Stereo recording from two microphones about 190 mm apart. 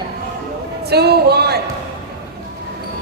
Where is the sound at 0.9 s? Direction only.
60° right (ahead or behind).